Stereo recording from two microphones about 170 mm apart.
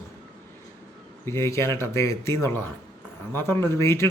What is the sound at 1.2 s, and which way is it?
Speech, 15° left (ahead or behind).